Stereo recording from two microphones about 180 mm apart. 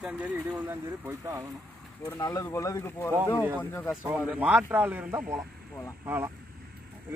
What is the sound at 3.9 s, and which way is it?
Speech, 10° right (ahead or behind).